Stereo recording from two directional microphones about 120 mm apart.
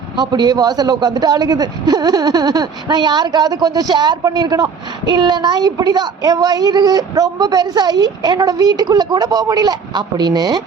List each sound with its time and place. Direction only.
0.2 s a man's voice: 35° right (ahead or behind)